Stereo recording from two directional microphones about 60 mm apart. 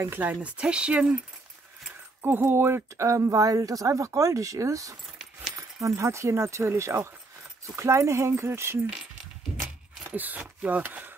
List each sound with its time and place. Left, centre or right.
0.2 s speech: right
2.2 s a woman's voice: right
10.1 s speech: right